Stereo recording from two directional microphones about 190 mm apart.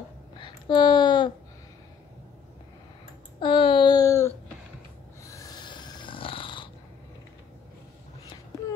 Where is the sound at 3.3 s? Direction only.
25° left (ahead or behind).